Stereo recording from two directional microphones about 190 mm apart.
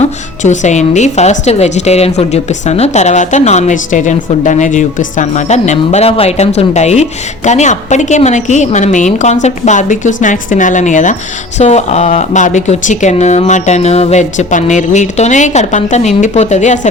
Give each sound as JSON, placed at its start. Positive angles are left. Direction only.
{"t": 0.0, "sound": "a woman's voice", "side_deg": 40}